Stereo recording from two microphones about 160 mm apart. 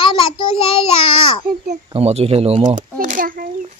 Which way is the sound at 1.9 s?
40° right (ahead or behind).